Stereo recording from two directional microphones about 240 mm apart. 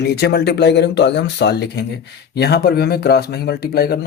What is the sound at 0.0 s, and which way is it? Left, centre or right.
Speech, left.